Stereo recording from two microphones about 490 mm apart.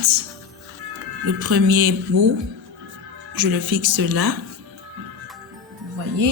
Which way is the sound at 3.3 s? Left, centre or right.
Right.